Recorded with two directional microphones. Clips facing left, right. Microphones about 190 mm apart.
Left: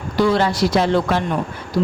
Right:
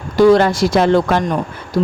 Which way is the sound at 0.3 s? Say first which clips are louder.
Right 7 dB; 50° right (ahead or behind).